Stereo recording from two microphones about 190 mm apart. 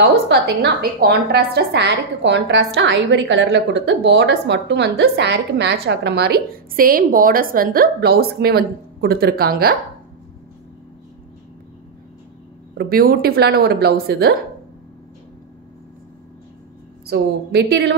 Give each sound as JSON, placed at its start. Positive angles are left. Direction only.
{"t": 0.0, "sound": "a woman's voice", "side_deg": -60}
{"t": 12.7, "sound": "speech", "side_deg": -50}
{"t": 17.0, "sound": "a woman's voice", "side_deg": -55}